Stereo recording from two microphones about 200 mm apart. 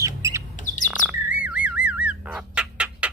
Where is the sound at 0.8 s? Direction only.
5° right (ahead or behind).